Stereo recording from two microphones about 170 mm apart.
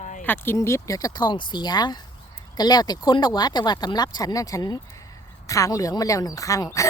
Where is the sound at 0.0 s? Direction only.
45° left (ahead or behind).